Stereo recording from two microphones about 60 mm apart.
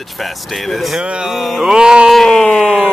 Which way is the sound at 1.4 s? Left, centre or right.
Centre.